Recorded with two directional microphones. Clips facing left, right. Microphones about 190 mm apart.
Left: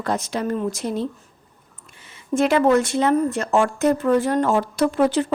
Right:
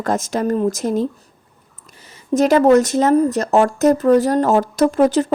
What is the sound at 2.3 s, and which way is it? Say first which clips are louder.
A woman's voice: right 5 dB; 40° right (ahead or behind).